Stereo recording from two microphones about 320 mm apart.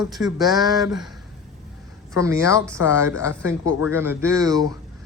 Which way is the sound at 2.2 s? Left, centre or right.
Centre.